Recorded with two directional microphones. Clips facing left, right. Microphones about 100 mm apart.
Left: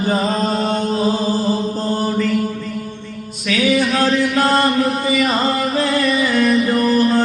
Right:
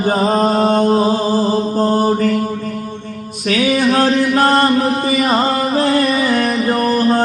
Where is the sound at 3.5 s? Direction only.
45° right (ahead or behind).